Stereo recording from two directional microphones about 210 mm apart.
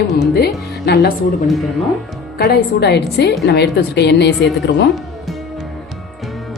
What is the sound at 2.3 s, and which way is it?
Speech, 50° left (ahead or behind).